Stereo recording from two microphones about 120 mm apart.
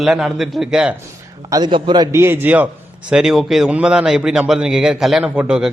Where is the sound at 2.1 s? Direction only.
20° right (ahead or behind).